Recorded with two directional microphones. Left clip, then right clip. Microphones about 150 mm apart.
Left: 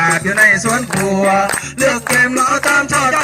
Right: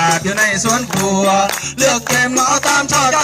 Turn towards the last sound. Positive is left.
turn(degrees=-25)  # may be behind; listen again after turning